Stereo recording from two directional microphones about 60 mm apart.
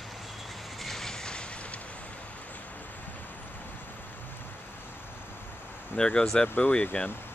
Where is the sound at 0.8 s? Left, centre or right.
Centre.